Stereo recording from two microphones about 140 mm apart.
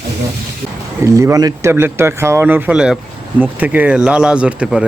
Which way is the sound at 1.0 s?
20° right (ahead or behind).